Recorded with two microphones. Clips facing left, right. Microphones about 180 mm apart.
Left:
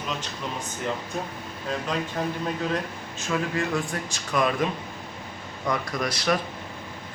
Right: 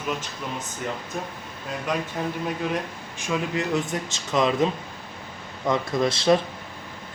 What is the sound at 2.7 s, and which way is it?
Speech, 15° right (ahead or behind).